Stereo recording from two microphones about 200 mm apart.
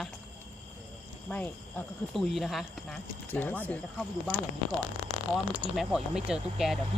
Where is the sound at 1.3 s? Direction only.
5° left (ahead or behind).